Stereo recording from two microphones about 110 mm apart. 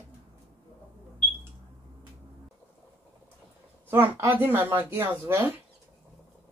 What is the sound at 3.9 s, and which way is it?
Speech, 20° right (ahead or behind).